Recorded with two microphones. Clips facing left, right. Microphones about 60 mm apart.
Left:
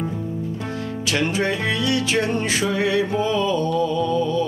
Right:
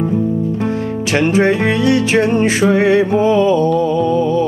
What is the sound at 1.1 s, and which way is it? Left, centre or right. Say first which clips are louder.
Music: right 9 dB; right.